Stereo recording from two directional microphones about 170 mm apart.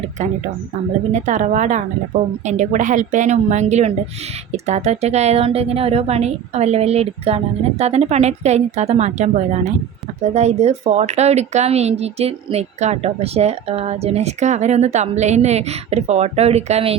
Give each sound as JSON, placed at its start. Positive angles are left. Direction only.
{"t": 1.1, "sound": "a woman's voice", "side_deg": -45}